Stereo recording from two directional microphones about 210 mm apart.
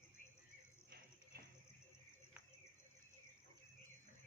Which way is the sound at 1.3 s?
45° right (ahead or behind).